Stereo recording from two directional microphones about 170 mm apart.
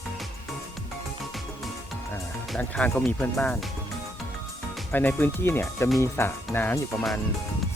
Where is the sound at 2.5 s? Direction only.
5° left (ahead or behind).